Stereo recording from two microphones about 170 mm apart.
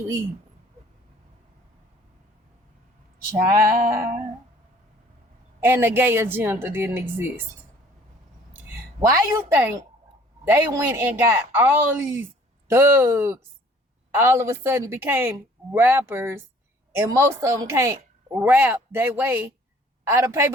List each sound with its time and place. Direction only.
3.5 s a woman's voice: 15° right (ahead or behind)
5.6 s a woman's voice: 15° right (ahead or behind)
8.7 s a woman's voice: 20° right (ahead or behind)